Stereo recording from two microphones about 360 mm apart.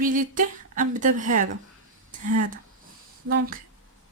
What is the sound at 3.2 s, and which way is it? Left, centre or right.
Speech, right.